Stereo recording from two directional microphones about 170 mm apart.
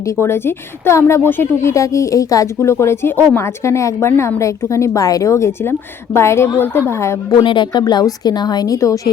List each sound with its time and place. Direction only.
0.0 s speech: 15° left (ahead or behind)
7.3 s a woman's voice: 30° left (ahead or behind)